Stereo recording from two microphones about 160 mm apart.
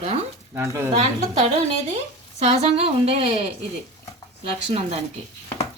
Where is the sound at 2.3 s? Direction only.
45° right (ahead or behind).